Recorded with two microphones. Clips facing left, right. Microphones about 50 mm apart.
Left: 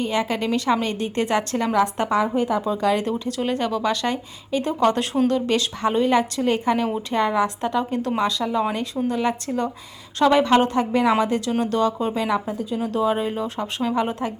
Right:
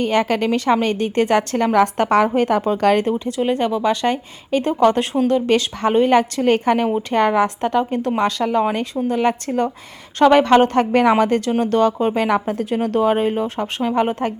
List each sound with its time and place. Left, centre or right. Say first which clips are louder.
0.0 s a woman's voice: right 5 dB; right
3.0 s a woman's voice: right 5 dB; right
13.0 s a woman's voice: right 5 dB; right